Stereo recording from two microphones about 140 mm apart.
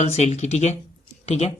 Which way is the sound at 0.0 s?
50° left (ahead or behind).